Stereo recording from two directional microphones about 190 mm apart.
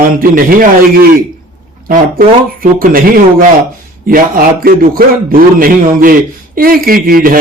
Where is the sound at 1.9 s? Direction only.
50° right (ahead or behind).